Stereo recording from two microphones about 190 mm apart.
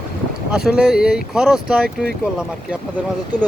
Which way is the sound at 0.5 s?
5° right (ahead or behind).